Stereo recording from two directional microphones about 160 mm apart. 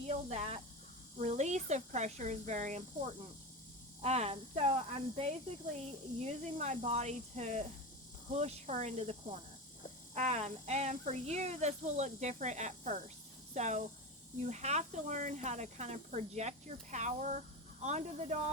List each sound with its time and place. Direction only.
0.1 s speech: 40° right (ahead or behind)
4.0 s speech: 45° right (ahead or behind)
6.2 s speech: 45° right (ahead or behind)